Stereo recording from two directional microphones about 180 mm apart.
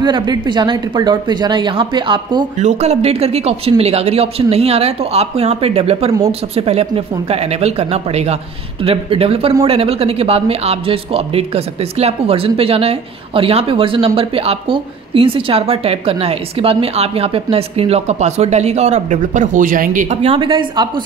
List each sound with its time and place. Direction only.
0.0 s speech: 25° right (ahead or behind)
2.6 s speech: 35° right (ahead or behind)